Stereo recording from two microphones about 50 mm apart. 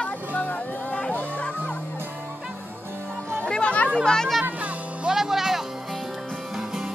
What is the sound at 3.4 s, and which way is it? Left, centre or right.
Music, left.